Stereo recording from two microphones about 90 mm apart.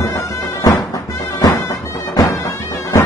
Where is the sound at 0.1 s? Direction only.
30° left (ahead or behind).